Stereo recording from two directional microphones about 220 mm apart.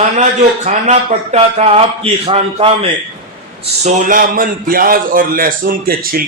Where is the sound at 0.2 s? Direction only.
30° right (ahead or behind).